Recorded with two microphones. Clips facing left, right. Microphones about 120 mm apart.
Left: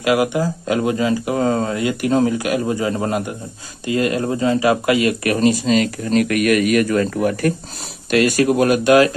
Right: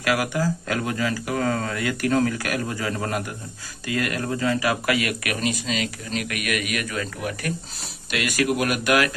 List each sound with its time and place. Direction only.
0.0 s speech: 20° left (ahead or behind); by 7.5 s 45° left (ahead or behind)
8.1 s speech: 35° left (ahead or behind)